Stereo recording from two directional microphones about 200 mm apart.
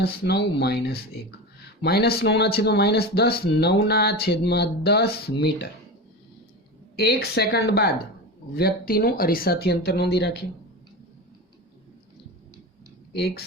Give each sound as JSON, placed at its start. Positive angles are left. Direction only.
{"t": 0.0, "sound": "speech", "side_deg": 55}
{"t": 6.9, "sound": "speech", "side_deg": 50}
{"t": 13.1, "sound": "speech", "side_deg": 50}